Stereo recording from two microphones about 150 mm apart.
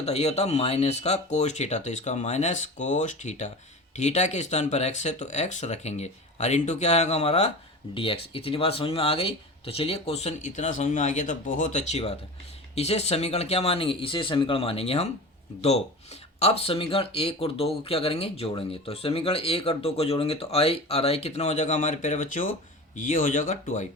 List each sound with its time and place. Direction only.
0.0 s speech: 45° left (ahead or behind)
16.4 s speech: 40° left (ahead or behind)